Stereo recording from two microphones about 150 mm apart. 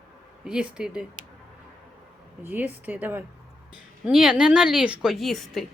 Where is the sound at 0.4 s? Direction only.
5° right (ahead or behind).